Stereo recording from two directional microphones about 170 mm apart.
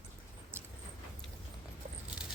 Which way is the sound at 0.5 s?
15° right (ahead or behind).